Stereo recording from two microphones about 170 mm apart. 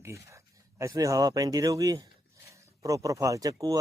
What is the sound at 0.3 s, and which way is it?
Speech, 15° right (ahead or behind).